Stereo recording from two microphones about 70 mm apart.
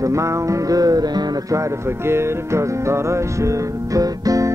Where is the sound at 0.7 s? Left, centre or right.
Right.